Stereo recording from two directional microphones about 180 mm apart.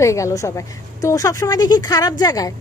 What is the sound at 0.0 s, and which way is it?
A woman's voice, 15° left (ahead or behind).